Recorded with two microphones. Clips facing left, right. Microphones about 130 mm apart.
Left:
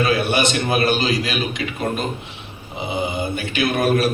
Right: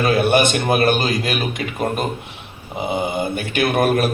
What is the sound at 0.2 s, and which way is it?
A man's voice, 50° right (ahead or behind).